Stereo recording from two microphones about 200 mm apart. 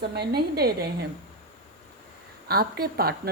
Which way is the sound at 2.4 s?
50° right (ahead or behind).